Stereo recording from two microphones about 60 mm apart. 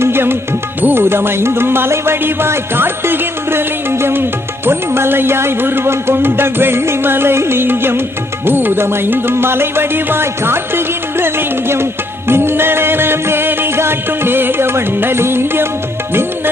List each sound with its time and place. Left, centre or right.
0.0 s music: right